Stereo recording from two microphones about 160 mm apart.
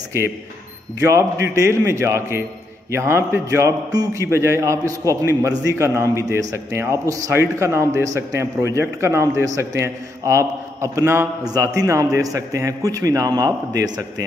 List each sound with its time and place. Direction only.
0.9 s a man's voice: 20° right (ahead or behind)